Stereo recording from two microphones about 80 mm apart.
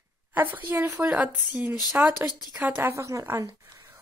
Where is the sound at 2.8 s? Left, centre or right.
Right.